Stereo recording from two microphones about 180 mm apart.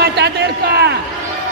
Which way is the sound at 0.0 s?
65° right (ahead or behind).